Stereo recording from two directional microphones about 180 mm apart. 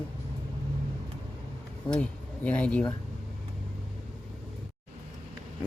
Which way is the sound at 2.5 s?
5° left (ahead or behind).